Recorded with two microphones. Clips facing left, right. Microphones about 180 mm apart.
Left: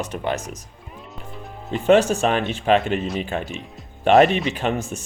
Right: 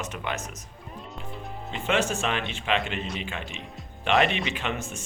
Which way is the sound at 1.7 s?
40° left (ahead or behind).